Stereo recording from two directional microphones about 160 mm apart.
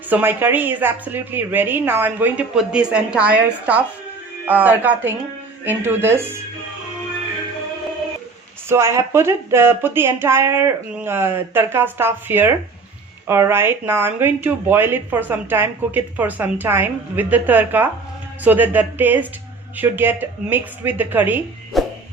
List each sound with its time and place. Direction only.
0.1 s speech: 15° right (ahead or behind)
8.7 s speech: 15° right (ahead or behind)
21.7 s music: centre (ahead or behind)